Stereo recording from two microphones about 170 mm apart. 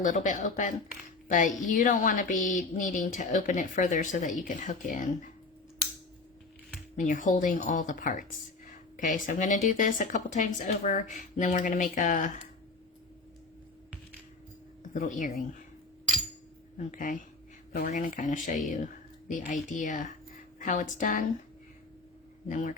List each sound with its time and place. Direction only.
0.0 s speech: 50° left (ahead or behind)
6.9 s speech: 50° left (ahead or behind)
14.9 s speech: 50° left (ahead or behind)
16.7 s speech: 50° left (ahead or behind)
22.4 s speech: 50° left (ahead or behind)